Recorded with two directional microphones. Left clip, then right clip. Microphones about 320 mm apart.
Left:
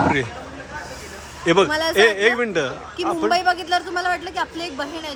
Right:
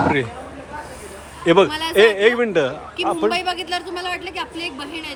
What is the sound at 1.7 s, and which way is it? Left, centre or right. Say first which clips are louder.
Speech: left 4 dB; centre.